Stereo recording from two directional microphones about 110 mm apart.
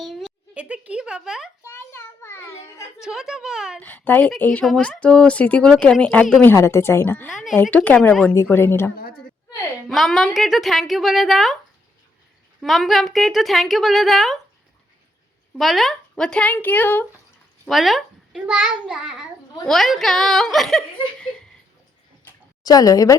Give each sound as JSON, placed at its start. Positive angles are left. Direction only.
{"t": 0.0, "sound": "a sound", "side_deg": 0}
{"t": 1.6, "sound": "child singing", "side_deg": 20}
{"t": 3.0, "sound": "a woman's voice", "side_deg": -5}
{"t": 3.8, "sound": "speech", "side_deg": 15}
{"t": 4.6, "sound": "a woman's voice", "side_deg": 0}
{"t": 6.4, "sound": "a woman's voice", "side_deg": 20}
{"t": 7.3, "sound": "a woman's voice", "side_deg": 0}
{"t": 7.5, "sound": "a woman's voice", "side_deg": 15}
{"t": 9.9, "sound": "a woman's voice", "side_deg": 0}
{"t": 12.5, "sound": "a woman's voice", "side_deg": 0}
{"t": 15.5, "sound": "speech", "side_deg": 0}
{"t": 17.7, "sound": "a child's voice", "side_deg": 0}
{"t": 22.6, "sound": "speech", "side_deg": 35}